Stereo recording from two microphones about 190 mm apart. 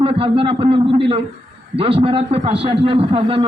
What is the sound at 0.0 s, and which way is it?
A man's voice, 30° right (ahead or behind).